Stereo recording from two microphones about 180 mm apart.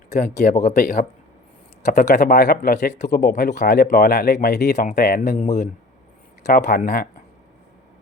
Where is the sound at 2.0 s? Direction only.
50° left (ahead or behind).